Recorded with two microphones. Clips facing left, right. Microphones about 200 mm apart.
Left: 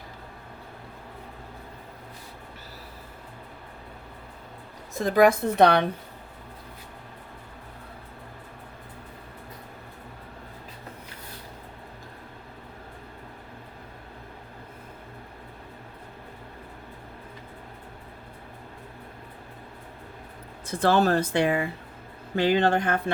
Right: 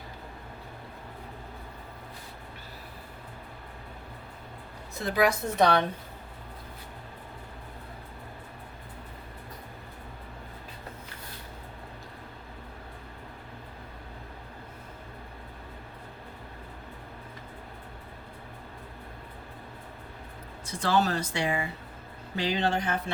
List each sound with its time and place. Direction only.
5.0 s a woman's voice: 50° left (ahead or behind)
20.7 s speech: 55° left (ahead or behind)